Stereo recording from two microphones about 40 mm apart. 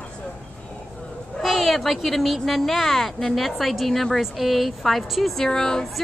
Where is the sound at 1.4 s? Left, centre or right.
Centre.